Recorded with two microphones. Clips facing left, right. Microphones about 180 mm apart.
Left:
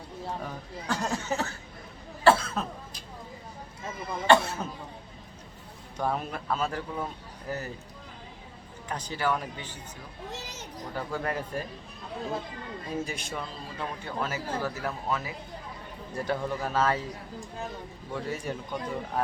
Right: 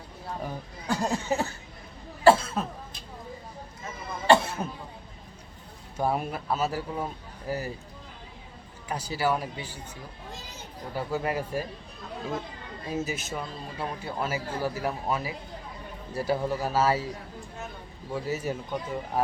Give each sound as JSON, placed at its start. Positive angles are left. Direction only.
{"t": 0.4, "sound": "a man's voice", "side_deg": -15}
{"t": 2.2, "sound": "cough", "side_deg": -10}
{"t": 4.3, "sound": "a sound", "side_deg": -10}
{"t": 6.0, "sound": "a man's voice", "side_deg": -10}
{"t": 8.9, "sound": "a man's voice", "side_deg": -10}
{"t": 10.3, "sound": "speech", "side_deg": 85}
{"t": 10.9, "sound": "a man's voice", "side_deg": -10}
{"t": 12.9, "sound": "a man's voice", "side_deg": -5}
{"t": 18.1, "sound": "a man's voice", "side_deg": -5}